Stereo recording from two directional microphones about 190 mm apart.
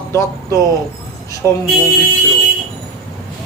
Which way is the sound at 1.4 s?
15° left (ahead or behind).